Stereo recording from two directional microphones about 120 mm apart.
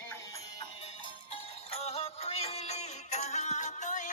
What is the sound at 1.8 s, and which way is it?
Music, 55° left (ahead or behind).